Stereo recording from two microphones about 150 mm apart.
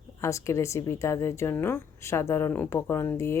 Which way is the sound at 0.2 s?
20° left (ahead or behind).